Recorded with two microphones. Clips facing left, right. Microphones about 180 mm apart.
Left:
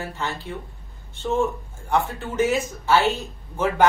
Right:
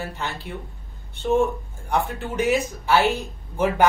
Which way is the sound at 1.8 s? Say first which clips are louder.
Left 1 dB; 15° right (ahead or behind).